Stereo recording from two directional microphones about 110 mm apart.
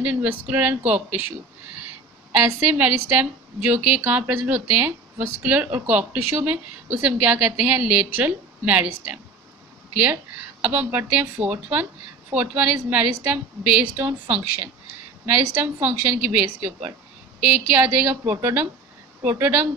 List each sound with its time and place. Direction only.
0.0 s speech: 15° right (ahead or behind)
2.3 s speech: 15° right (ahead or behind)
10.6 s speech: 15° right (ahead or behind)